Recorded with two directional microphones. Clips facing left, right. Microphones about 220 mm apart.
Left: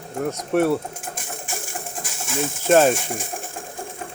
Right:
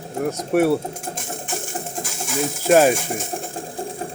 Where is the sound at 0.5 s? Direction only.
10° right (ahead or behind).